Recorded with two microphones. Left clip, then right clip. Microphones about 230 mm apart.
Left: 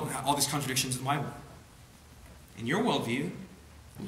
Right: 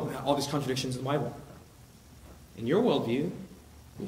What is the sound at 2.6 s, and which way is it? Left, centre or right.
Speech, left.